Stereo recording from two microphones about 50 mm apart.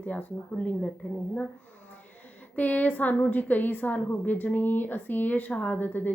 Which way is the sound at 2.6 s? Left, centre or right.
Left.